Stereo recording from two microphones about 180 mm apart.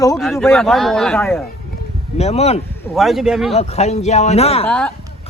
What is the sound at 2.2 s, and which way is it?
Speech, 35° left (ahead or behind).